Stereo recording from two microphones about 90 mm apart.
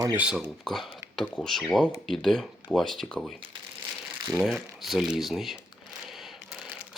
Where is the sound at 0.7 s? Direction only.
5° left (ahead or behind).